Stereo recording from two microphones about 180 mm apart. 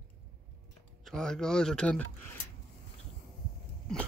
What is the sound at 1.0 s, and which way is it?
Speech, 5° left (ahead or behind).